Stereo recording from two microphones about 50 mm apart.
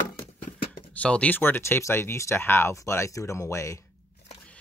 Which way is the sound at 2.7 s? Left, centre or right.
Left.